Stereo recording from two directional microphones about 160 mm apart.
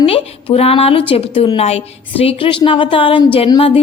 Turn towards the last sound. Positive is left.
turn(degrees=35)  # may be behind; listen again after turning